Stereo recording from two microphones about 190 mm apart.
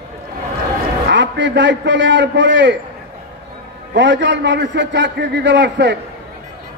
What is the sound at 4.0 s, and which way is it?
A man's voice, 70° right (ahead or behind).